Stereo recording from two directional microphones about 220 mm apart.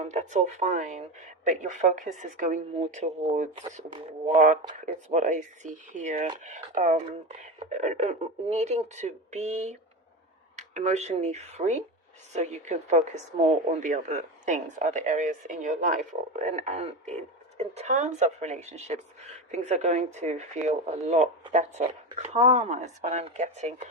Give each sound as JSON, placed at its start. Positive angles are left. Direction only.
{"t": 0.0, "sound": "speech", "side_deg": -30}